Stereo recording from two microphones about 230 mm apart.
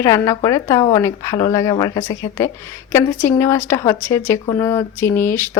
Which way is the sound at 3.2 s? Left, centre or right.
Centre.